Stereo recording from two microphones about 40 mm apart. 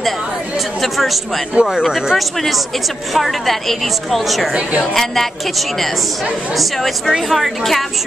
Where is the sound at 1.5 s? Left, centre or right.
Centre.